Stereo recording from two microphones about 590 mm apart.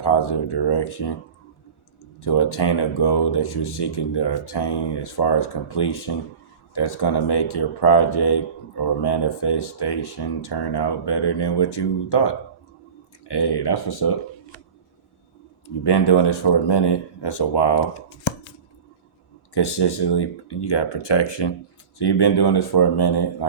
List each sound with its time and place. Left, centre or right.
0.0 s speech: left
2.2 s speech: left
15.6 s speech: left
19.5 s speech: left